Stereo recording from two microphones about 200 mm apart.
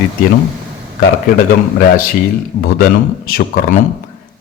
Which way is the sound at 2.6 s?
50° left (ahead or behind).